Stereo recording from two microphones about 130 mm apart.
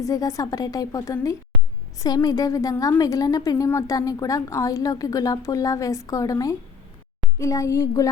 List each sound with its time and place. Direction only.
0.0 s a woman's voice: 25° left (ahead or behind)